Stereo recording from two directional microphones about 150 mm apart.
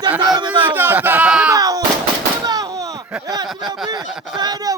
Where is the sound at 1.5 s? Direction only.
25° right (ahead or behind).